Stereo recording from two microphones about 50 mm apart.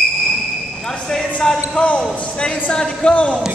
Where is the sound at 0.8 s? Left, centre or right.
Centre.